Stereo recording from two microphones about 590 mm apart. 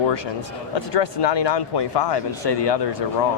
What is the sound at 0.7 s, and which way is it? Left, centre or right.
Speech, left.